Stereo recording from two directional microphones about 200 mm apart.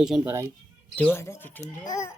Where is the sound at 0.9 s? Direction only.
10° left (ahead or behind).